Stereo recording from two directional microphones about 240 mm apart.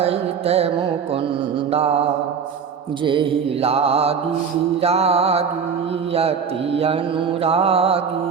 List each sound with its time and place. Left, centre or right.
0.0 s carnatic music: right
3.0 s mantra: right
7.4 s mantra: right